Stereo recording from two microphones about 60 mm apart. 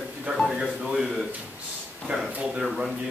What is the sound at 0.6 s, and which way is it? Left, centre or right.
Speech, centre.